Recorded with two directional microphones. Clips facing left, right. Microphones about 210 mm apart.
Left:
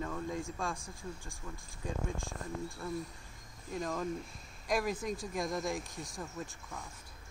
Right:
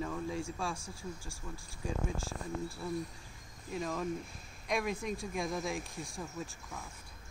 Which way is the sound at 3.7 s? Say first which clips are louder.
Even; 5° right (ahead or behind).